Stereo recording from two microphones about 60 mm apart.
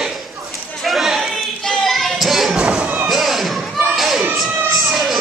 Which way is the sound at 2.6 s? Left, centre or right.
Centre.